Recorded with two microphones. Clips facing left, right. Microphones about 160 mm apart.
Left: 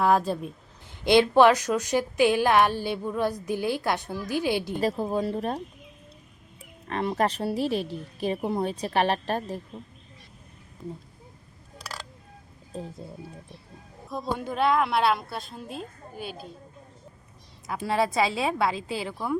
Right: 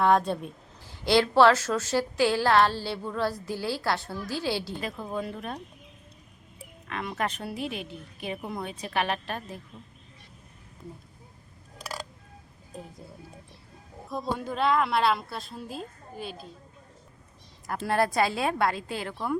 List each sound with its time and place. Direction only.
0.0 s a woman's voice: 5° left (ahead or behind)
0.9 s a woman's voice: 20° left (ahead or behind)
4.8 s a woman's voice: 35° left (ahead or behind)
6.8 s a woman's voice: 35° left (ahead or behind)
14.1 s a woman's voice: centre (ahead or behind)
17.7 s a woman's voice: centre (ahead or behind)